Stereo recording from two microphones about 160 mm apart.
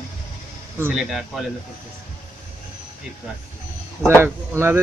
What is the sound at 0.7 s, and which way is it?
Speech, 10° right (ahead or behind).